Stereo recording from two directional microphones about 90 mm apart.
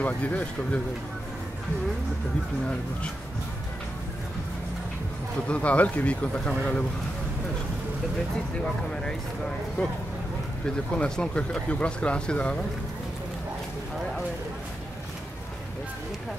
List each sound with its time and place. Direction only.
0.0 s speech: 15° left (ahead or behind)
5.5 s speech: 15° left (ahead or behind)
9.8 s speech: 15° left (ahead or behind)
11.0 s speech: 10° left (ahead or behind)